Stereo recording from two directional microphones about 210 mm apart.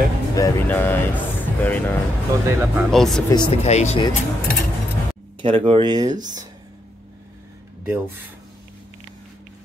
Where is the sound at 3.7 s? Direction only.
30° left (ahead or behind).